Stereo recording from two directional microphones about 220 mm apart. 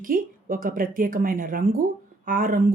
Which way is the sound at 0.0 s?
40° right (ahead or behind).